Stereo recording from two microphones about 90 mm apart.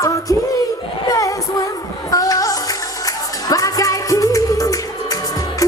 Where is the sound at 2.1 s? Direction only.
40° left (ahead or behind).